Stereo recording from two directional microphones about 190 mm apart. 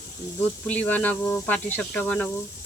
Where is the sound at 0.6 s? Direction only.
10° left (ahead or behind).